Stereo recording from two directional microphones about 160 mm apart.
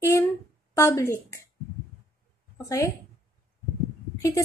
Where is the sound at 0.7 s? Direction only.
15° left (ahead or behind).